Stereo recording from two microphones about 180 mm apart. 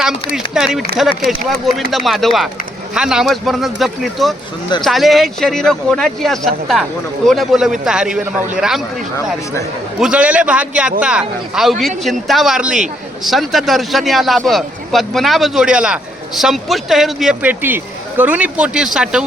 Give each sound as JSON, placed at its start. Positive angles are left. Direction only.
{"t": 0.3, "sound": "a man's voice", "side_deg": -5}
{"t": 9.1, "sound": "speech", "side_deg": 15}
{"t": 10.0, "sound": "a man's voice", "side_deg": -5}